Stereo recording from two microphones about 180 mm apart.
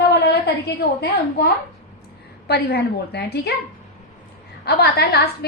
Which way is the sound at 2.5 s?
65° left (ahead or behind).